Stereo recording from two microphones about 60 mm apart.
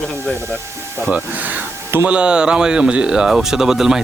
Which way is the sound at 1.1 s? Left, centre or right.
Right.